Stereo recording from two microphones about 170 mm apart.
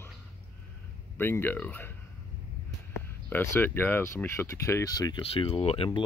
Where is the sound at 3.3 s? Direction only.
10° left (ahead or behind).